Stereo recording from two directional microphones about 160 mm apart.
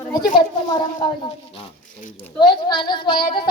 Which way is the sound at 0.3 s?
25° left (ahead or behind).